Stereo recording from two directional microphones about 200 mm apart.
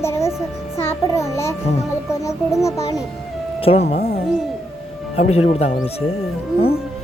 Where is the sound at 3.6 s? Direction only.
30° left (ahead or behind).